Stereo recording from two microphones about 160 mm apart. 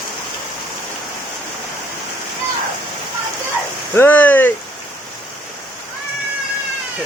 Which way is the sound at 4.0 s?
10° left (ahead or behind).